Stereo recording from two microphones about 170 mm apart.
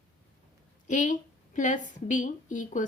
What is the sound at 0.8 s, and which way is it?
A woman's voice, 50° left (ahead or behind).